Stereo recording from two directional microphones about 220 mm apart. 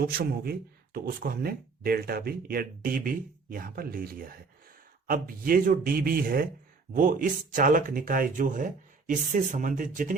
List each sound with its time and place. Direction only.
0.0 s speech: 45° right (ahead or behind)